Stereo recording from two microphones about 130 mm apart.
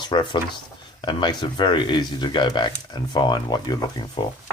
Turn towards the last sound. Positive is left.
turn(degrees=40)  # may be behind; listen again after turning